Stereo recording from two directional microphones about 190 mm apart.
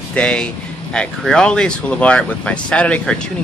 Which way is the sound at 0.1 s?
5° left (ahead or behind).